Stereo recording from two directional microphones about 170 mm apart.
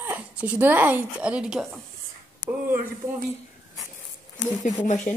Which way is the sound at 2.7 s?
55° right (ahead or behind).